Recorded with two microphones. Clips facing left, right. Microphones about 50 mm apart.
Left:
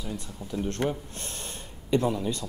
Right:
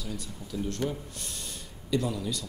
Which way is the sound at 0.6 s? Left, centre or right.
Left.